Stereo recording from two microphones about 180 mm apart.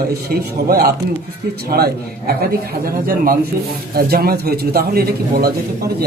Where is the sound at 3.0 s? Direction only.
55° right (ahead or behind).